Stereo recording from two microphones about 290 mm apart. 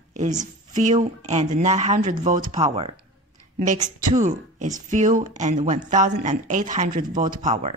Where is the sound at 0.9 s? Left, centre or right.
Right.